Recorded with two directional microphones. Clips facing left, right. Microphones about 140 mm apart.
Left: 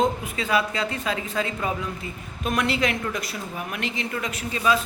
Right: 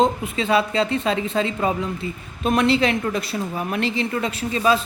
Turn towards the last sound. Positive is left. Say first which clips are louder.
# right 4 dB
turn(degrees=-30)  # may be behind; listen again after turning